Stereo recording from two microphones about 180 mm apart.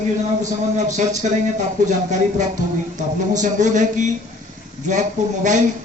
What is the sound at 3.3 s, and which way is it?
Speech, 45° right (ahead or behind).